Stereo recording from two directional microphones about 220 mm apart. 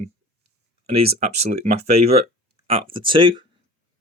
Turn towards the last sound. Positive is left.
turn(degrees=-20)  # may be behind; listen again after turning